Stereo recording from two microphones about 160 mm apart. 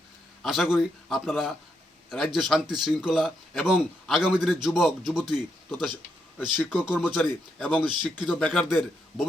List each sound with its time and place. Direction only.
0.4 s speech: centre (ahead or behind)
7.9 s speech: 30° right (ahead or behind)
8.3 s speech: 5° left (ahead or behind)